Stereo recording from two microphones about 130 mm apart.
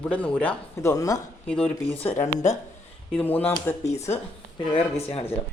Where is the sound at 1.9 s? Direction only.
55° left (ahead or behind).